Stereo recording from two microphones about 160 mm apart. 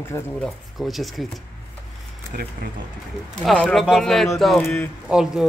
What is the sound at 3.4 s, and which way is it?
Speech, 5° left (ahead or behind).